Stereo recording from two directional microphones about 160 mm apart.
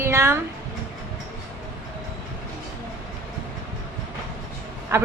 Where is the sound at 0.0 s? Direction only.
15° right (ahead or behind).